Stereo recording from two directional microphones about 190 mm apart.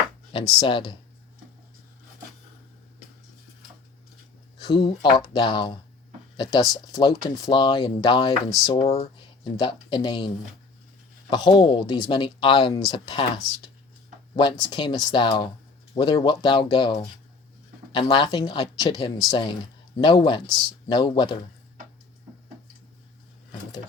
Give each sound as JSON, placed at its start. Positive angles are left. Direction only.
{"t": 0.3, "sound": "speech", "side_deg": 25}
{"t": 4.6, "sound": "speech", "side_deg": 25}
{"t": 8.8, "sound": "speech", "side_deg": 30}
{"t": 14.7, "sound": "speech", "side_deg": 25}